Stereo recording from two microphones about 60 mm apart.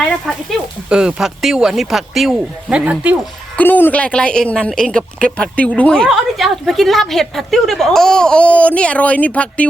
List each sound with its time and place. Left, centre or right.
0.3 s speech: centre
0.9 s speech: centre
2.6 s speech: right
3.6 s speech: left
4.0 s a woman's voice: centre
6.1 s a woman's voice: centre; by 9.6 s left